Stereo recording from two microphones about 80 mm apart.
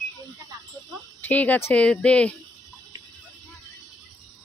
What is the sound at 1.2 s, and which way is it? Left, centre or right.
Speech, left.